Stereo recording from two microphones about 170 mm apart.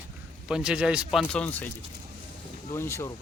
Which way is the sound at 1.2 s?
5° left (ahead or behind).